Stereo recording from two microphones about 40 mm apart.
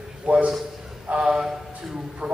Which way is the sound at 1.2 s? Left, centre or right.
Centre.